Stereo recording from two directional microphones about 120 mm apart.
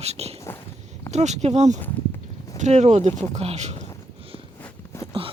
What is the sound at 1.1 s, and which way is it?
Speech, 70° right (ahead or behind).